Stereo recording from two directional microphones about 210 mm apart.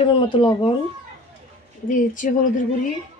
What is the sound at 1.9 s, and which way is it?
Speech, 40° left (ahead or behind).